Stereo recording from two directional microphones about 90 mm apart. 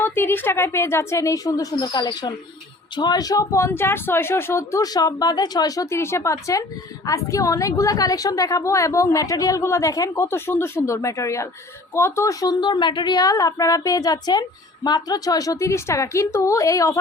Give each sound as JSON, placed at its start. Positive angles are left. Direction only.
{"t": 0.0, "sound": "speech", "side_deg": 25}
{"t": 4.8, "sound": "speech", "side_deg": 45}
{"t": 10.2, "sound": "a woman's voice", "side_deg": 25}